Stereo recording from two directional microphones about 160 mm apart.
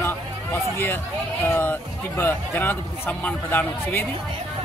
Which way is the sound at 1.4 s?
15° left (ahead or behind).